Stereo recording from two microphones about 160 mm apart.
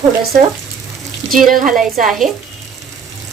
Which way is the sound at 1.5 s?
55° right (ahead or behind).